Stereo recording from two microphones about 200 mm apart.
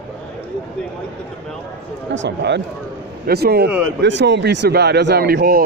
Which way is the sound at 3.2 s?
50° right (ahead or behind).